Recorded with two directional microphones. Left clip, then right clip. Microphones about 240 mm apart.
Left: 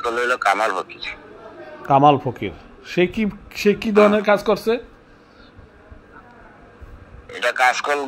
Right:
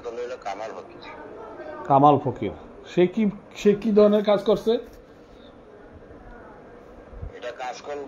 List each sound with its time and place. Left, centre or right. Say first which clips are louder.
0.0 s a man's voice: left 13 dB; left
1.8 s speech: left 3 dB; centre
7.3 s a man's voice: left 16 dB; left